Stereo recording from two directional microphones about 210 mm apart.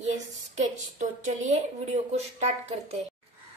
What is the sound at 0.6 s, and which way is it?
A woman's voice, 35° right (ahead or behind).